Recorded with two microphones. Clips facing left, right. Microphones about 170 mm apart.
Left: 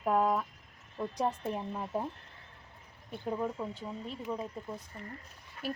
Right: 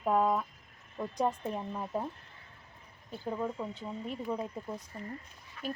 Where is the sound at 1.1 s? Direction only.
5° left (ahead or behind).